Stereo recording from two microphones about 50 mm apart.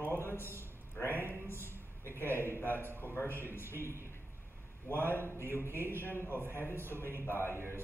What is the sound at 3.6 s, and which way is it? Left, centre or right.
Speech, right.